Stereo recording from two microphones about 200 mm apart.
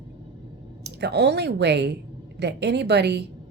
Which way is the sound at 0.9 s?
55° right (ahead or behind).